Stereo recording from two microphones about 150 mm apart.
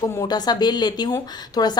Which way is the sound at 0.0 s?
25° left (ahead or behind).